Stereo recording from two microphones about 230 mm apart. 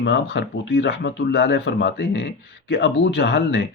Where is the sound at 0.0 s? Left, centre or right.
Left.